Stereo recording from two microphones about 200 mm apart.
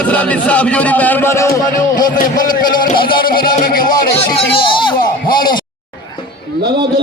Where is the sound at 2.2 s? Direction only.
45° left (ahead or behind).